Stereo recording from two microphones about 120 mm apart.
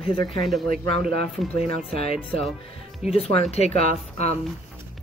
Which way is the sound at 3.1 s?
55° left (ahead or behind).